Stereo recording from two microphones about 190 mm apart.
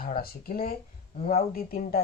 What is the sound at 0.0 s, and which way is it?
Speech, 50° left (ahead or behind).